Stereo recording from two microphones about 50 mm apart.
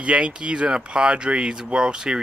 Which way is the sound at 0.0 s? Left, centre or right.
Right.